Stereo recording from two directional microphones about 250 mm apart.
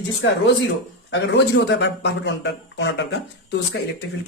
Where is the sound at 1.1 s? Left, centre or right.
Left.